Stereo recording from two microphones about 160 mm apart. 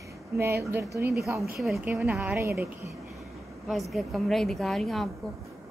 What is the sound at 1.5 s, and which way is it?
Speech, centre (ahead or behind).